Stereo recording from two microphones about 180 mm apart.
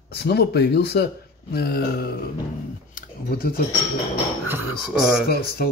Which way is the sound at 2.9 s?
55° left (ahead or behind).